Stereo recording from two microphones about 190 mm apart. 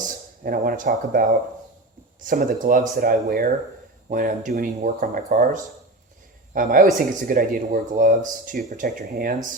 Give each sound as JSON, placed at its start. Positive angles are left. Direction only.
{"t": 0.0, "sound": "speech", "side_deg": -45}
{"t": 2.2, "sound": "a man's voice", "side_deg": -45}